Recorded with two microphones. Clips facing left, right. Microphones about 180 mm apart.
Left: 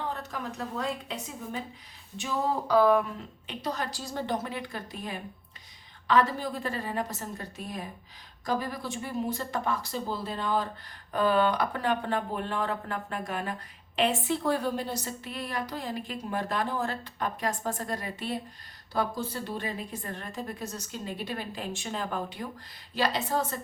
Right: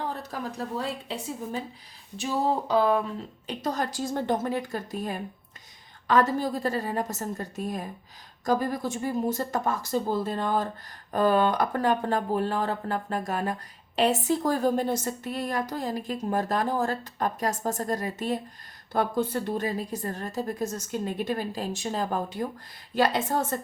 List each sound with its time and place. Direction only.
0.2 s a woman's voice: 35° right (ahead or behind)
2.6 s speech: 25° right (ahead or behind)
3.4 s a woman's voice: 45° right (ahead or behind)